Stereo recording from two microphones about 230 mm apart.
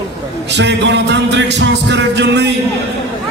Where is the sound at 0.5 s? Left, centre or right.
Right.